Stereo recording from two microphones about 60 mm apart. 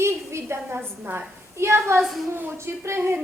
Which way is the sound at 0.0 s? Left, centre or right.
Right.